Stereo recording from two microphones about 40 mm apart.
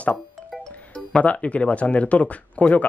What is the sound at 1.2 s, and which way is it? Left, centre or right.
Speech, left.